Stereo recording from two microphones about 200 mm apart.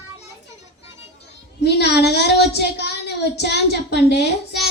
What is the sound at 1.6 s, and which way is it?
Speech, 55° left (ahead or behind).